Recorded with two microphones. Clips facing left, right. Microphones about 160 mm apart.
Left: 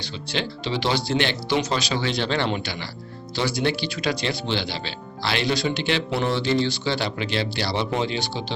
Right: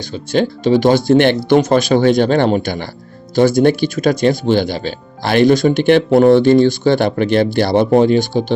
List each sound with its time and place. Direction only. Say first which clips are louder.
0.0 s speech: right 12 dB; 45° right (ahead or behind)